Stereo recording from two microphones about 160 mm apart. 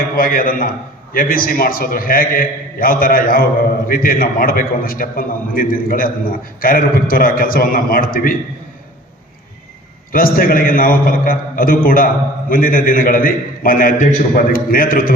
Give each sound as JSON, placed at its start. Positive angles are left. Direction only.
{"t": 0.0, "sound": "a man's voice", "side_deg": 65}
{"t": 10.1, "sound": "a man's voice", "side_deg": 65}